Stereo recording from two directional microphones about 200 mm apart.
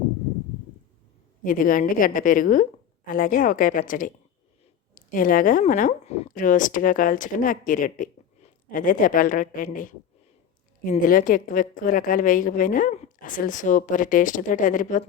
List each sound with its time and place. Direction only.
1.5 s a woman's voice: 45° left (ahead or behind)